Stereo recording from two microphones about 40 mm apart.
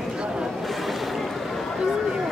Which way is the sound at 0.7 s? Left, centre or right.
Centre.